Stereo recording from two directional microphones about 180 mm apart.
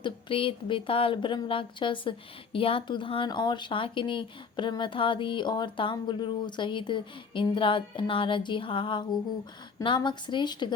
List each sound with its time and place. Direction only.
0.0 s speech: 30° left (ahead or behind)